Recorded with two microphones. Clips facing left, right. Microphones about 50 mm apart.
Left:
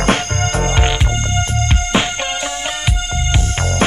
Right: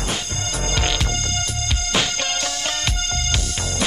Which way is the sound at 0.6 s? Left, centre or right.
Left.